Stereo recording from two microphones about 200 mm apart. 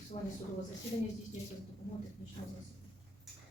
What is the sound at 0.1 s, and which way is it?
Speech, 35° left (ahead or behind).